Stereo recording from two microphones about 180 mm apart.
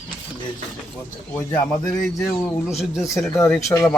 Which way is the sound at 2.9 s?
15° left (ahead or behind).